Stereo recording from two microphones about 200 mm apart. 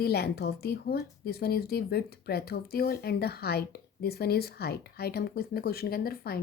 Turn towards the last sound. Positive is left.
turn(degrees=50)  # may be behind; listen again after turning